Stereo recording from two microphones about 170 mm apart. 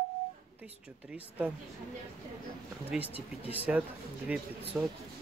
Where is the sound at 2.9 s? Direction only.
10° right (ahead or behind).